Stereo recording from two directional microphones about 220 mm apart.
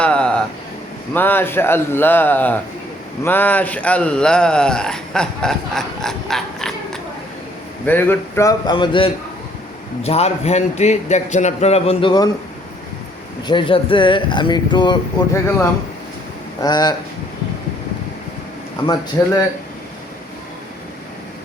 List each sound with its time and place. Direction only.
0.0 s a sound: 5° left (ahead or behind)
1.1 s a man's voice: 10° left (ahead or behind)
13.5 s a man's voice: 20° left (ahead or behind)
16.6 s a man's voice: 20° left (ahead or behind)
19.2 s speech: 10° left (ahead or behind)